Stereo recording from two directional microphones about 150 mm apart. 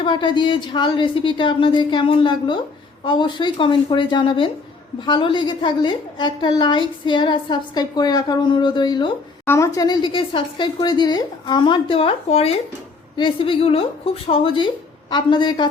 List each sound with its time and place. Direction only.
0.0 s a woman's voice: 30° left (ahead or behind)